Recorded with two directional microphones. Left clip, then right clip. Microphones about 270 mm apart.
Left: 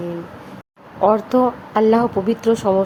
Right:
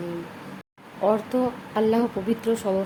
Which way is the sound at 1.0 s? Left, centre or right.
Centre.